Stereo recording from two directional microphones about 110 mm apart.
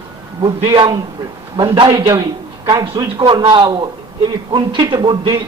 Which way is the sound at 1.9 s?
30° right (ahead or behind).